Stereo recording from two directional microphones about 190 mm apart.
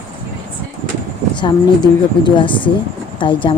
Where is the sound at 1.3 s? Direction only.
25° left (ahead or behind).